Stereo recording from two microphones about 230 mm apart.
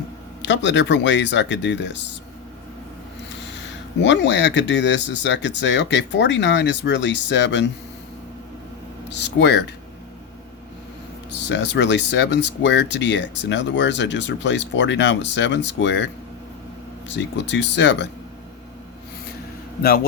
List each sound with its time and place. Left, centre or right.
0.4 s speech: left
4.0 s speech: left
9.0 s speech: left
11.4 s speech: left
17.1 s speech: left